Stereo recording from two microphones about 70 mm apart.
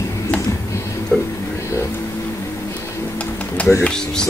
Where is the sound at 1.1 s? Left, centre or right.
Centre.